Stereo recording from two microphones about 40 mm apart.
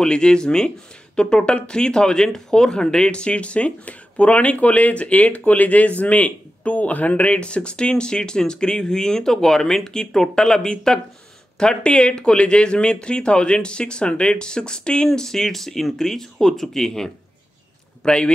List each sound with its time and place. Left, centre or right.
0.0 s speech: left
18.0 s speech: left